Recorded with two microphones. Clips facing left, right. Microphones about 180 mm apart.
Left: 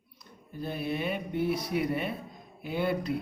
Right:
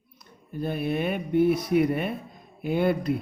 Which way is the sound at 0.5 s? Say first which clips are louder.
Right 5 dB; 55° right (ahead or behind).